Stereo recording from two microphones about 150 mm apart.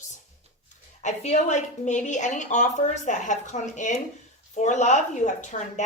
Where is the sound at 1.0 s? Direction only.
50° left (ahead or behind).